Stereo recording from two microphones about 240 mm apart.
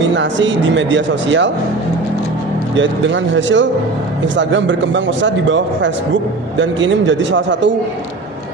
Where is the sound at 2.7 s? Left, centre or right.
Right.